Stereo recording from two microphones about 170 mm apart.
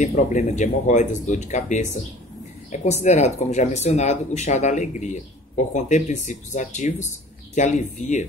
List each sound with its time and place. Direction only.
0.0 s speech: 45° left (ahead or behind)